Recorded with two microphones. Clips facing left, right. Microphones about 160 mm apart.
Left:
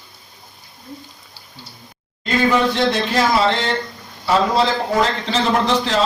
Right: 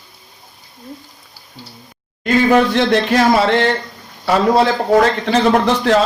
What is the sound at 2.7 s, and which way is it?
Speech, 60° right (ahead or behind).